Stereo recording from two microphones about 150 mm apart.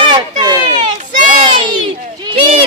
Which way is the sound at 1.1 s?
60° right (ahead or behind).